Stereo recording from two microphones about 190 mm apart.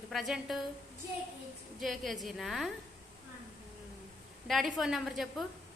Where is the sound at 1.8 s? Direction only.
Centre (ahead or behind).